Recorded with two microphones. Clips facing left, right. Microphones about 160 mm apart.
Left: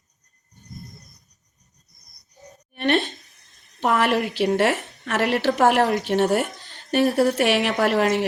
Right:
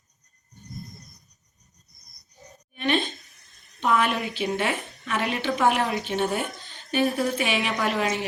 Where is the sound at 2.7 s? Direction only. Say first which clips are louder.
Left 4 dB; 70° left (ahead or behind).